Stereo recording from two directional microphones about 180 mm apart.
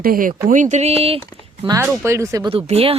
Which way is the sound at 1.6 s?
20° right (ahead or behind).